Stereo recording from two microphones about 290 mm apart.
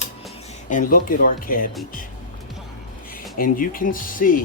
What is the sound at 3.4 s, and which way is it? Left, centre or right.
Speech, left.